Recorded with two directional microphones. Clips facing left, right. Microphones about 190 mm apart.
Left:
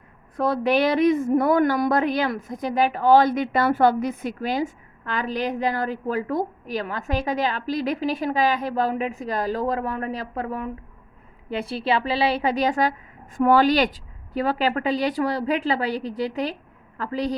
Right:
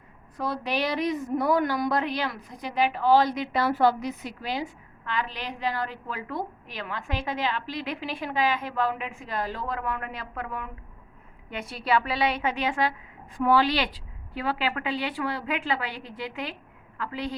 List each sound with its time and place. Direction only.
0.3 s a woman's voice: 55° left (ahead or behind); by 17.3 s 40° left (ahead or behind)